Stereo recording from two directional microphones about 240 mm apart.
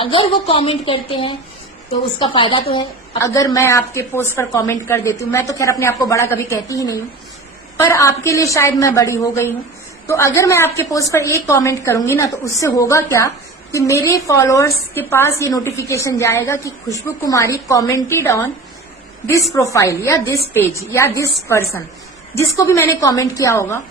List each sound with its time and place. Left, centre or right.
0.0 s a woman's voice: left
19.5 s a woman's voice: centre
22.4 s a woman's voice: centre